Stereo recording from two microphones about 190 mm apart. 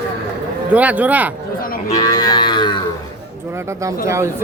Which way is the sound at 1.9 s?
20° left (ahead or behind).